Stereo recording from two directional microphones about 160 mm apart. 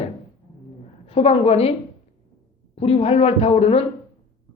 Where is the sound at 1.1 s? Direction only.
40° left (ahead or behind).